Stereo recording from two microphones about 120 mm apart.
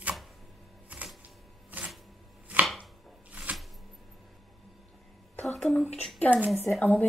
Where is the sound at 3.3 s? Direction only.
10° right (ahead or behind).